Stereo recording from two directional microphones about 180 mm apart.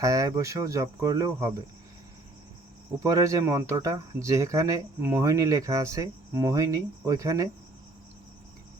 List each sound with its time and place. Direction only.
0.0 s speech: 20° right (ahead or behind)
3.0 s speech: 15° right (ahead or behind)